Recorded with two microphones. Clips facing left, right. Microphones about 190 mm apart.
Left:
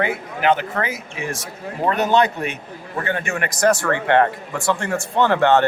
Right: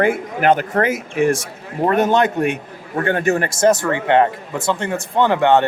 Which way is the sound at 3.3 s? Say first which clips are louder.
Right 3 dB; 30° right (ahead or behind).